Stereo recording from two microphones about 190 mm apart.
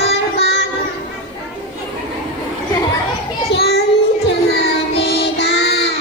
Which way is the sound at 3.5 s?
60° left (ahead or behind).